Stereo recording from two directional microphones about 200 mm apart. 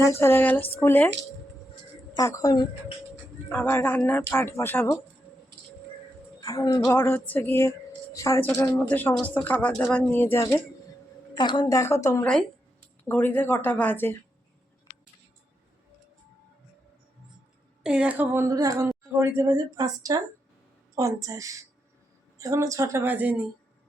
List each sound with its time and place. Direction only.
0.0 s speech: 10° left (ahead or behind)
2.1 s speech: 15° left (ahead or behind)
6.4 s speech: 15° left (ahead or behind)
11.3 s speech: 20° left (ahead or behind)
17.8 s speech: 5° right (ahead or behind)